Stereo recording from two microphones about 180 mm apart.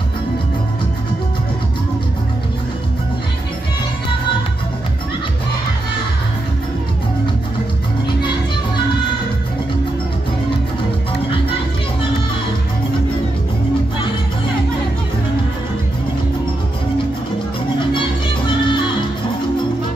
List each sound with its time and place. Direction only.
18.7 s music: 25° left (ahead or behind)